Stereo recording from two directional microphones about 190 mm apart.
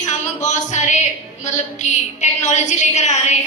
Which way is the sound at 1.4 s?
40° left (ahead or behind).